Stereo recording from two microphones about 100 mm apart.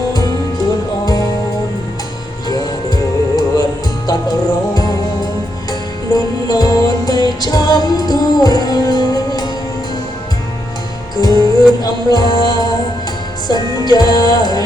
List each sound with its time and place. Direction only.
2.5 s music: 45° left (ahead or behind)
6.1 s music: 40° left (ahead or behind)
11.3 s music: 40° left (ahead or behind)